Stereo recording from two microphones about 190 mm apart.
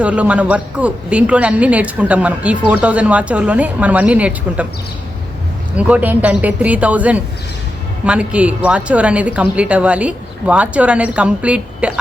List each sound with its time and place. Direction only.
0.0 s a woman's voice: 5° right (ahead or behind)
5.7 s a woman's voice: 10° right (ahead or behind)